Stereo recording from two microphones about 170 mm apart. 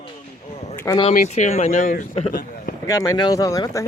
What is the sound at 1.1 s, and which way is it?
Speech, 55° left (ahead or behind).